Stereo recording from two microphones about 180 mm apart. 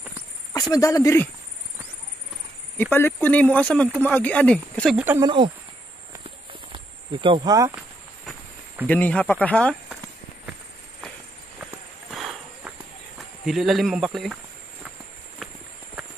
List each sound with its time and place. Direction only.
0.5 s speech: 20° left (ahead or behind)
2.8 s speech: 10° left (ahead or behind)
4.9 s speech: 10° right (ahead or behind)
5.2 s speech: 25° right (ahead or behind)
6.7 s cricket: 25° right (ahead or behind)
8.8 s speech: 10° left (ahead or behind)
12.1 s clip-clop: 5° right (ahead or behind)
13.5 s speech: centre (ahead or behind)